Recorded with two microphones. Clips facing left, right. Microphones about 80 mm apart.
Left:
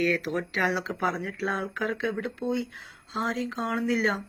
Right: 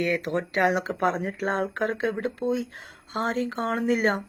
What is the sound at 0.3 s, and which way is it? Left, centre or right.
Speech, right.